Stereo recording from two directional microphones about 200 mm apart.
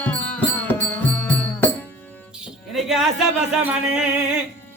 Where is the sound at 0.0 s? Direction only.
10° left (ahead or behind).